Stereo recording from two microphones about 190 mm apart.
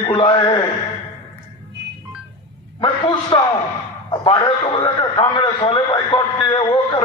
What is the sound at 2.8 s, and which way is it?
A man's voice, 25° left (ahead or behind).